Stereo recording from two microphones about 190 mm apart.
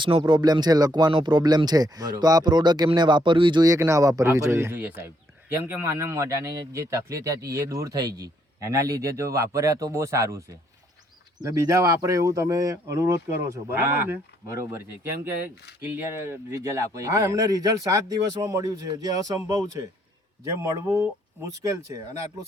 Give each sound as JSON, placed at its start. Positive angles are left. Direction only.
{"t": 0.0, "sound": "speech", "side_deg": -25}
{"t": 11.4, "sound": "speech", "side_deg": -15}
{"t": 16.5, "sound": "speech", "side_deg": -15}